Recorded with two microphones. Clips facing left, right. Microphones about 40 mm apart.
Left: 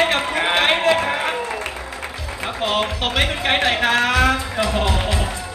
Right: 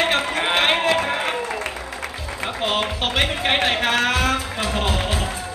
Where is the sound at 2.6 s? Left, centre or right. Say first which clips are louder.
Left 2 dB; centre.